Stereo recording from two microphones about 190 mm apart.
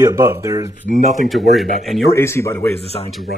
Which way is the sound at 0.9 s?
45° right (ahead or behind).